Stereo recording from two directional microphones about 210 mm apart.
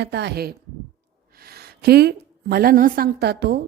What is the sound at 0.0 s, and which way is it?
A woman's voice, 55° right (ahead or behind).